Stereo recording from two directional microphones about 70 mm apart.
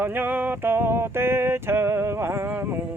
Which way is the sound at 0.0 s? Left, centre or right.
Right.